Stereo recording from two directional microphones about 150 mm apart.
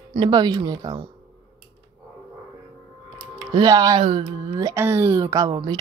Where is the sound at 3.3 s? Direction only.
30° right (ahead or behind).